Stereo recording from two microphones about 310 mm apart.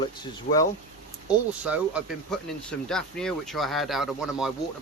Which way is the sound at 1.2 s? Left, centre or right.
Centre.